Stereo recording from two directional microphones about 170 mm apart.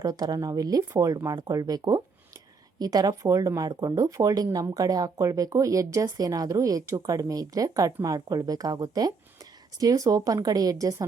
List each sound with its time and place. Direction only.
0.0 s speech: 20° right (ahead or behind)